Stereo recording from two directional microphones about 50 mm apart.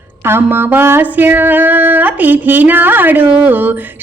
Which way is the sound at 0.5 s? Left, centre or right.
Right.